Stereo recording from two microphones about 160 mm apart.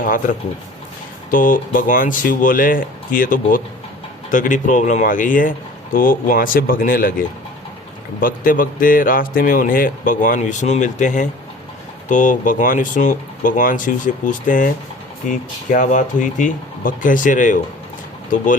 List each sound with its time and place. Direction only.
0.0 s speech: 55° left (ahead or behind)